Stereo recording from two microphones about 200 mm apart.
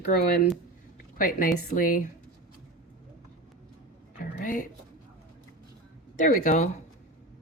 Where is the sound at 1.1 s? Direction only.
45° left (ahead or behind).